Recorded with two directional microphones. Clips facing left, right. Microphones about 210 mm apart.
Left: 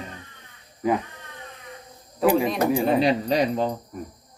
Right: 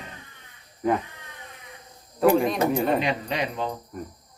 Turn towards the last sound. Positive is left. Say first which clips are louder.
# left 6 dB
turn(degrees=35)  # may be behind; listen again after turning